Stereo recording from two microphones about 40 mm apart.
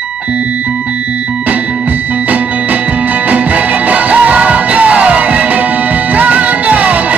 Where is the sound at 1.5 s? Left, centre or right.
Right.